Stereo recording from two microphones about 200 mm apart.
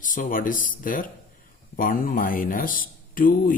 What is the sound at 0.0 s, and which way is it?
Speech, 40° left (ahead or behind).